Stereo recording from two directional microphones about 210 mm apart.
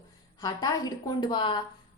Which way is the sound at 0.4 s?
20° left (ahead or behind).